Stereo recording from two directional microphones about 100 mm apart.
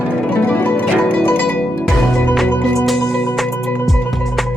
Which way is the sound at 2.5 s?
30° left (ahead or behind).